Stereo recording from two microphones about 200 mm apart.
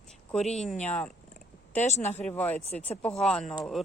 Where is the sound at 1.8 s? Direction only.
35° left (ahead or behind).